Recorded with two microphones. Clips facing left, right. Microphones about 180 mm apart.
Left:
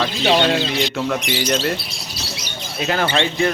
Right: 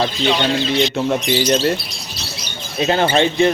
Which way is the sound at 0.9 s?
25° right (ahead or behind).